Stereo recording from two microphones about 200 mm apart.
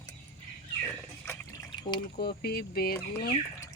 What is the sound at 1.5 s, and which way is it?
Trickle, 20° left (ahead or behind).